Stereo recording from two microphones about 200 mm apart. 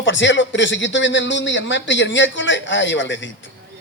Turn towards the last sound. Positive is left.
turn(degrees=65)  # may be behind; listen again after turning